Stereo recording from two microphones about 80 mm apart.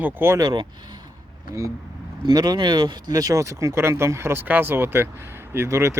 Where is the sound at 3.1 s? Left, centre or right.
Right.